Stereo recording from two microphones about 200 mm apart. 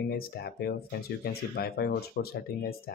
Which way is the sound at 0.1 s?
50° left (ahead or behind).